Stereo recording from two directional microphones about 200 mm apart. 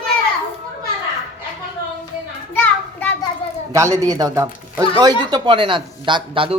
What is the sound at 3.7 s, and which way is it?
Speech, 15° right (ahead or behind).